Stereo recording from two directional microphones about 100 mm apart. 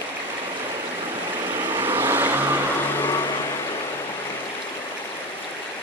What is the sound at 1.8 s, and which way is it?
Vehicle, 25° right (ahead or behind).